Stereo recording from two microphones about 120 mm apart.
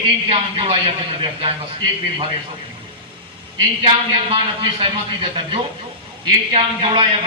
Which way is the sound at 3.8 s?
50° right (ahead or behind).